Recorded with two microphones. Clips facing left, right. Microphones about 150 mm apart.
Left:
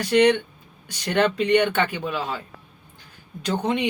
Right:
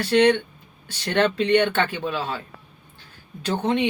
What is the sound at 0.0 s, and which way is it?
Speech, 10° left (ahead or behind).